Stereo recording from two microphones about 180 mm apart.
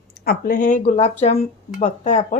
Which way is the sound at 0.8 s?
40° left (ahead or behind).